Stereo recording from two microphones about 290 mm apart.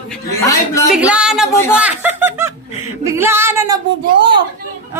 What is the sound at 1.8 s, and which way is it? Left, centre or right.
Snicker, centre.